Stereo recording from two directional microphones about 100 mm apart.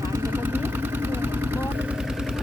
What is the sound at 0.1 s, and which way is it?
Engine, 25° right (ahead or behind).